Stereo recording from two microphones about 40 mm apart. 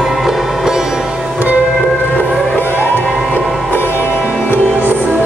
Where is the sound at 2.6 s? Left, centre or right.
Left.